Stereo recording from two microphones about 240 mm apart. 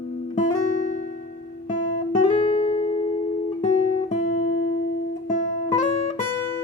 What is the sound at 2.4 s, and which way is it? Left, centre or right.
Guitar, left.